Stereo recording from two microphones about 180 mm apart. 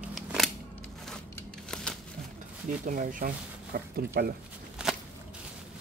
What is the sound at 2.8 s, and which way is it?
Speech, 50° right (ahead or behind).